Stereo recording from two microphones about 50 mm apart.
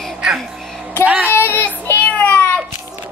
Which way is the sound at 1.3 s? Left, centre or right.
Left.